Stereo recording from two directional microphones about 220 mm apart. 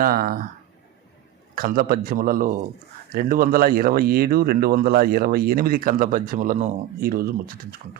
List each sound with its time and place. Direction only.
0.0 s speech: 40° right (ahead or behind)
1.5 s speech: 40° right (ahead or behind)